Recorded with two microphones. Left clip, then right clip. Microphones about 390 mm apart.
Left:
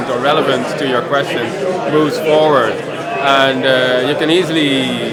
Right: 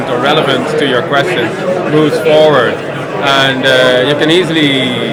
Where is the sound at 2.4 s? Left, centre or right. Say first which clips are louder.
Right 3 dB; left.